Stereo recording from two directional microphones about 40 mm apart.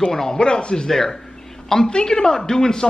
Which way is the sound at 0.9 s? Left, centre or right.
Centre.